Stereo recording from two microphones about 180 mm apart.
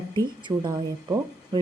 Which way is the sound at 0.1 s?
25° right (ahead or behind).